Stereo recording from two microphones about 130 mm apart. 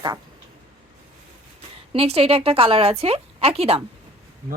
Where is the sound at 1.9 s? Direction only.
50° right (ahead or behind).